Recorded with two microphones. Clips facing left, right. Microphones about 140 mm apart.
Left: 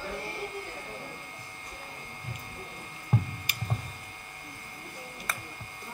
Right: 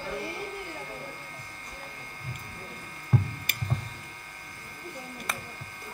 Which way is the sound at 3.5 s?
55° right (ahead or behind).